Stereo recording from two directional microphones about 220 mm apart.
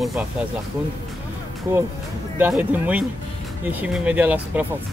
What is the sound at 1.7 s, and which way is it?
Speech, 10° right (ahead or behind).